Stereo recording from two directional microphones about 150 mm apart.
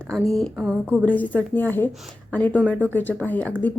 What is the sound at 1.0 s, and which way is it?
Speech, 10° left (ahead or behind).